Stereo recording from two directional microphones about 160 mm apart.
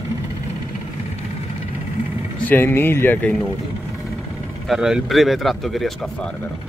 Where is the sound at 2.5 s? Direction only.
15° left (ahead or behind).